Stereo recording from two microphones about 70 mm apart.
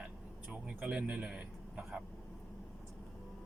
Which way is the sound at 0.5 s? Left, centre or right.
Centre.